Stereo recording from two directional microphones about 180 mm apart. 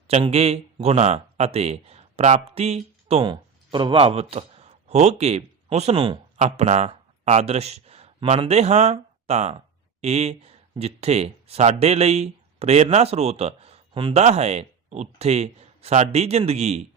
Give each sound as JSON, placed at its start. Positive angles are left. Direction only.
{"t": 0.1, "sound": "a man's voice", "side_deg": -35}
{"t": 6.3, "sound": "speech", "side_deg": -40}